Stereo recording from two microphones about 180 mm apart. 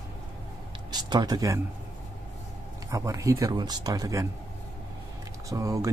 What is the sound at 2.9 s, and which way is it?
Speech, 20° right (ahead or behind).